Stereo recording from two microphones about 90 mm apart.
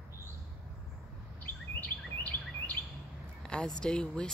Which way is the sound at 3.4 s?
10° left (ahead or behind).